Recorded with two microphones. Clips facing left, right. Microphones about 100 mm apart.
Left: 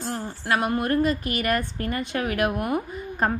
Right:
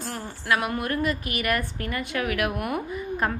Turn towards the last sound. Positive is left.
turn(degrees=30)  # may be behind; listen again after turning